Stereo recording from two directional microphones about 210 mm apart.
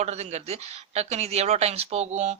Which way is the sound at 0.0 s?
30° right (ahead or behind).